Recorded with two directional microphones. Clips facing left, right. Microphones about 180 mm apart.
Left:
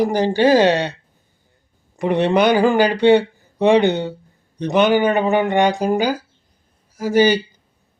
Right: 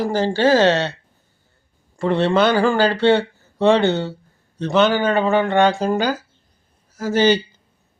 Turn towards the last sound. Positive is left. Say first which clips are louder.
# left 1 dB
turn(degrees=10)  # may be behind; listen again after turning